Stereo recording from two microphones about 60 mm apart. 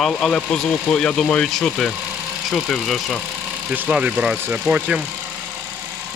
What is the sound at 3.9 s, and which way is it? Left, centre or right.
Speech, centre.